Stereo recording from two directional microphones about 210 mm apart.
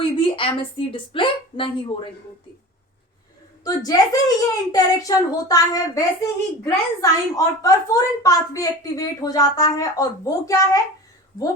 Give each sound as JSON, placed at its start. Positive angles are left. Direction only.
{"t": 0.0, "sound": "a woman's voice", "side_deg": 25}
{"t": 3.6, "sound": "a woman's voice", "side_deg": 15}